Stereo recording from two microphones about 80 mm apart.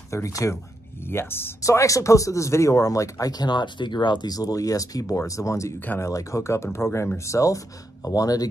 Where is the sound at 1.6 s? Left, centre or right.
Left.